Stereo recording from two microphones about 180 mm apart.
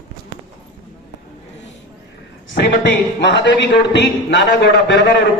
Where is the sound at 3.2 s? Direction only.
75° left (ahead or behind).